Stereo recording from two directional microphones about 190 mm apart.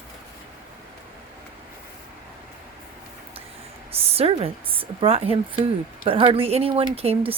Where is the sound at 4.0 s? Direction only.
30° right (ahead or behind).